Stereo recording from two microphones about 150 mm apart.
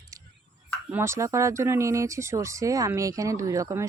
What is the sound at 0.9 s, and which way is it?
Speech, 15° right (ahead or behind).